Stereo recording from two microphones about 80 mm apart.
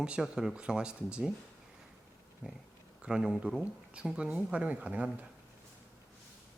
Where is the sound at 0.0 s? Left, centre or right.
Centre.